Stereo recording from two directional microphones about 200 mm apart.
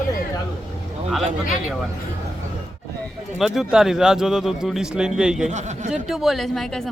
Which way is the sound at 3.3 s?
Centre (ahead or behind).